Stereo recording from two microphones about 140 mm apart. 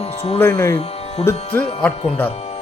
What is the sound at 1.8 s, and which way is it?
Speech, 10° left (ahead or behind).